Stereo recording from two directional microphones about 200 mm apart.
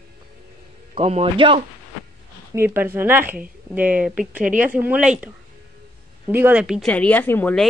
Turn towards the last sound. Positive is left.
turn(degrees=5)  # may be behind; listen again after turning